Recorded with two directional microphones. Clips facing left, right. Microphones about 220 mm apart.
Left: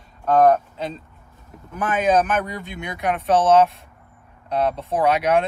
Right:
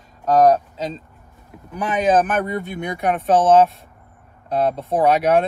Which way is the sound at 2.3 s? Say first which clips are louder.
Right 3 dB; 45° right (ahead or behind).